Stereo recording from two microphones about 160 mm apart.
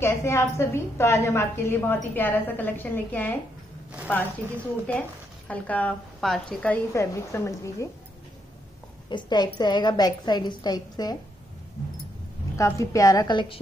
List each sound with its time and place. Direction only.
0.0 s a woman's voice: 15° left (ahead or behind)
4.4 s speech: 20° right (ahead or behind)
5.5 s a woman's voice: 10° left (ahead or behind)
6.9 s a woman's voice: 20° left (ahead or behind)
9.1 s a woman's voice: 25° left (ahead or behind)
12.5 s a woman's voice: 20° left (ahead or behind)